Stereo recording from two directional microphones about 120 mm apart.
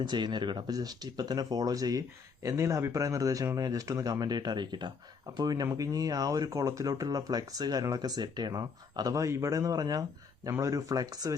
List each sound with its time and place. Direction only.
0.0 s speech: 40° right (ahead or behind)